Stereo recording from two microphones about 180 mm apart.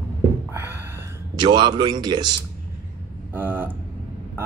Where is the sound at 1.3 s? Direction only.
25° right (ahead or behind).